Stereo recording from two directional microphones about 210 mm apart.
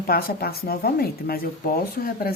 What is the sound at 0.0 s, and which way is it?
Speech, 45° left (ahead or behind).